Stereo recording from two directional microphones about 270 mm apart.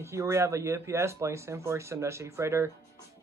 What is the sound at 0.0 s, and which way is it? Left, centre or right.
Speech, centre.